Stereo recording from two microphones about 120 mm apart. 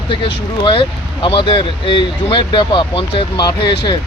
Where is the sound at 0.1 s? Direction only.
45° left (ahead or behind).